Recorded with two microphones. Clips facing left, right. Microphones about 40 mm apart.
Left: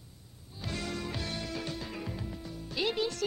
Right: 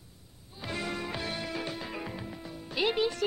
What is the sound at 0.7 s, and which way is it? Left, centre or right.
Music, centre.